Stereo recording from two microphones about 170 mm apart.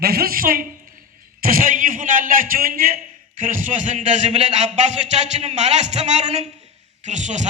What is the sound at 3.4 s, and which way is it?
A man's voice, 50° right (ahead or behind).